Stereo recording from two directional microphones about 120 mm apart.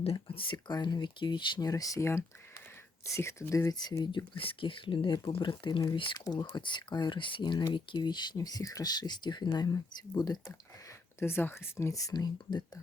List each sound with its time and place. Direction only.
0.0 s speech: 50° left (ahead or behind); by 10.5 s 35° left (ahead or behind)
11.2 s speech: 20° left (ahead or behind); by 12.8 s 35° left (ahead or behind)